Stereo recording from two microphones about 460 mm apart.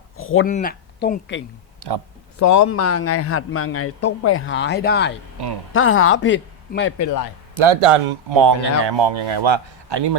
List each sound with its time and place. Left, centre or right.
0.2 s speech: left
1.8 s speech: right
2.4 s a man's voice: left
7.0 s a man's voice: left
7.5 s a man's voice: right